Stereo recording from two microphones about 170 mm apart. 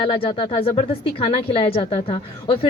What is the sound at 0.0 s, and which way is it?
Speech, 30° left (ahead or behind).